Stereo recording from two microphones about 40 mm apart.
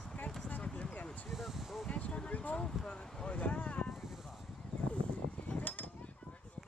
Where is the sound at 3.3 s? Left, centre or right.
Left.